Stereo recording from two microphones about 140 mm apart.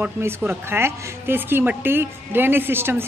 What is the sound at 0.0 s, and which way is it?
A woman's voice, 15° right (ahead or behind).